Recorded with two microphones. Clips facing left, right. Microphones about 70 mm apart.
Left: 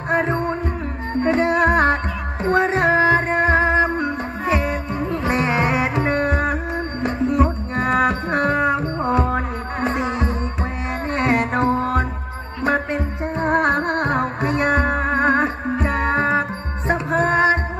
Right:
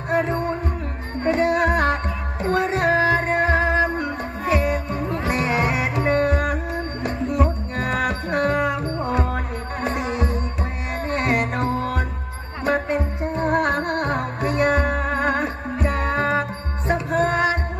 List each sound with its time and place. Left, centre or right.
0.1 s music: left